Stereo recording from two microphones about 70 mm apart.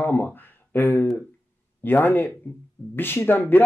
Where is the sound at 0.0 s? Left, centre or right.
Left.